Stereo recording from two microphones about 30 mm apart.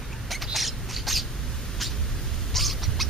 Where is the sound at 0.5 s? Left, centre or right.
Centre.